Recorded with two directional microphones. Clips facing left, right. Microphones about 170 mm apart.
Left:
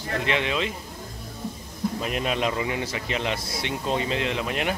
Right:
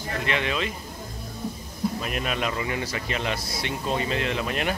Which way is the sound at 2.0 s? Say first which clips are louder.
Left 2 dB; 25° left (ahead or behind).